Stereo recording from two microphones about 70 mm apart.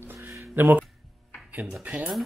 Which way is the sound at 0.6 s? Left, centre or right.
Right.